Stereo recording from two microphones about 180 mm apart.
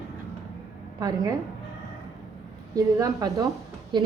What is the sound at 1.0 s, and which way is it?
Speech, 20° right (ahead or behind).